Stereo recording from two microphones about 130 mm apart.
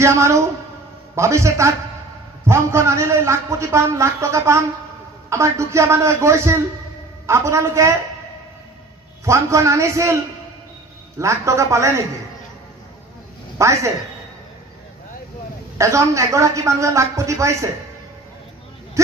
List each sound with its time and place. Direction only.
0.0 s a man's voice: 20° right (ahead or behind)
9.2 s a man's voice: 20° right (ahead or behind)
13.6 s a man's voice: 25° right (ahead or behind)
15.8 s a man's voice: 25° right (ahead or behind)